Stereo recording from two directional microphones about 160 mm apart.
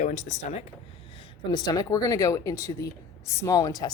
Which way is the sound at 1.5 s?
25° left (ahead or behind).